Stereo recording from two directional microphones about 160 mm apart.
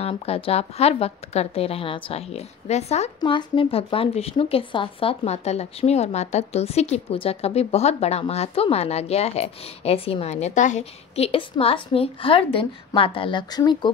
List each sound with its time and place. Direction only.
0.0 s speech: 40° left (ahead or behind)
3.2 s speech: 30° left (ahead or behind)